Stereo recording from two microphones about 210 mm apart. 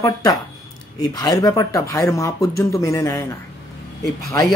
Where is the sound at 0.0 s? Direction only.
20° left (ahead or behind).